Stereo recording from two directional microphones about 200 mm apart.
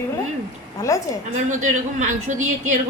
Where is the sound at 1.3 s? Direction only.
40° right (ahead or behind).